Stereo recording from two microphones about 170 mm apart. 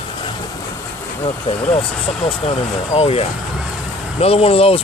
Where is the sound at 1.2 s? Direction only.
35° left (ahead or behind).